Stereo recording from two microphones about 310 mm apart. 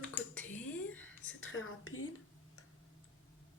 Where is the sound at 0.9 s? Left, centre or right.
Left.